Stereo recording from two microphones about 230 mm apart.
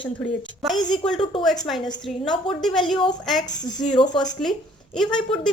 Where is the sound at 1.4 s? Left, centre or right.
Centre.